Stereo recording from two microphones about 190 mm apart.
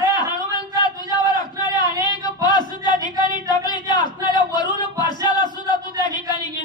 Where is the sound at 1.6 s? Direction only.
25° left (ahead or behind).